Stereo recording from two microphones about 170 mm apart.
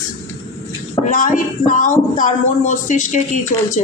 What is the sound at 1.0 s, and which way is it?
A woman's voice, 50° left (ahead or behind).